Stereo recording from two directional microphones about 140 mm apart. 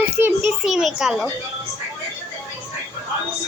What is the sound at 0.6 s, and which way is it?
Speech, centre (ahead or behind).